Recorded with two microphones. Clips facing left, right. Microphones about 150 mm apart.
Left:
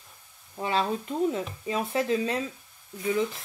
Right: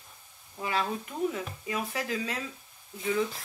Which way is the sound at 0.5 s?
25° left (ahead or behind).